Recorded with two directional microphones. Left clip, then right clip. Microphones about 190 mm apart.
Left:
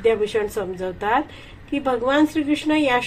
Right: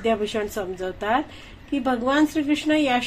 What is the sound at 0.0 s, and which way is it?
A woman's voice, 30° right (ahead or behind).